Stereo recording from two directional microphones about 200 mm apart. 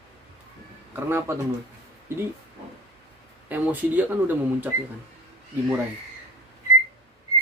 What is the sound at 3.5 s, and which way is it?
Speech, 10° right (ahead or behind).